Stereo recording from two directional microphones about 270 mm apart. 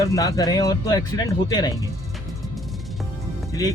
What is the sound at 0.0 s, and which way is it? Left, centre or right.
Speech, centre.